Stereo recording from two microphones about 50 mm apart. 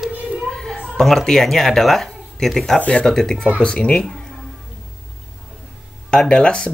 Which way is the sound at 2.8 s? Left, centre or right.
Left.